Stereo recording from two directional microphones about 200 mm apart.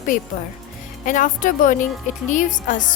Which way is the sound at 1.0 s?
40° left (ahead or behind).